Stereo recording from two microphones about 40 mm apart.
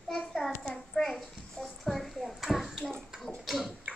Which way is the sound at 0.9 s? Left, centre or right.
Centre.